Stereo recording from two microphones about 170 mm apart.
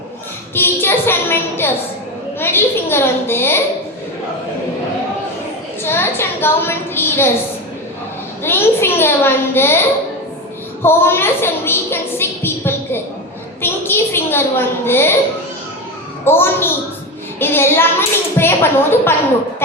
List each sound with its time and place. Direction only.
0.5 s child singing: 15° left (ahead or behind)
2.4 s a child's voice: 15° left (ahead or behind)
5.8 s a sound: 15° left (ahead or behind)
8.4 s a child's voice: 15° left (ahead or behind)
10.8 s a woman's voice: 15° left (ahead or behind)
13.6 s a sound: 15° left (ahead or behind)
16.2 s a child's voice: 15° left (ahead or behind)